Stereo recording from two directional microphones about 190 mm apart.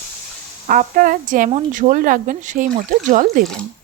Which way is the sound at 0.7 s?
45° right (ahead or behind).